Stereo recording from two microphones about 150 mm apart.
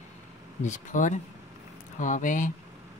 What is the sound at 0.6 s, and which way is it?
Speech, 55° left (ahead or behind).